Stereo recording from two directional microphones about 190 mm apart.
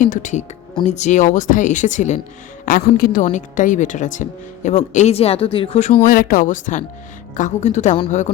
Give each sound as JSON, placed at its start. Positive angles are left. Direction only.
{"t": 0.0, "sound": "speech", "side_deg": 40}
{"t": 2.6, "sound": "speech", "side_deg": 50}
{"t": 6.1, "sound": "speech", "side_deg": 45}